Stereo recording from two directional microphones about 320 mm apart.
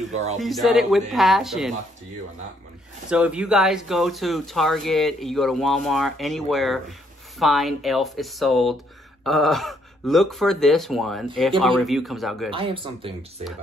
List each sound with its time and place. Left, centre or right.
0.1 s speech: right
0.4 s speech: centre
3.1 s speech: centre
12.4 s speech: centre